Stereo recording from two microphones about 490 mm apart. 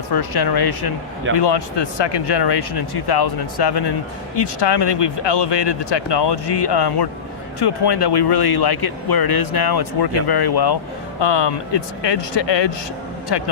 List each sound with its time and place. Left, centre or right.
0.1 s speech: left